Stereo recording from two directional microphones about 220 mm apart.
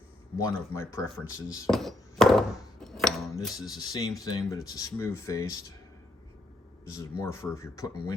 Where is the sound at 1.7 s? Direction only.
Centre (ahead or behind).